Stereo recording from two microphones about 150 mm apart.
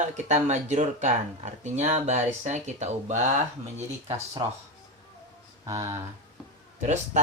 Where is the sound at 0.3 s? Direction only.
50° right (ahead or behind).